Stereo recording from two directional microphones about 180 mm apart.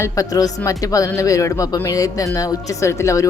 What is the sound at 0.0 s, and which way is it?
A woman's voice, 20° left (ahead or behind).